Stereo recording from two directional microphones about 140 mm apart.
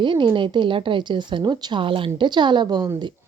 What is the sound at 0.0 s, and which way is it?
Speech, 35° right (ahead or behind).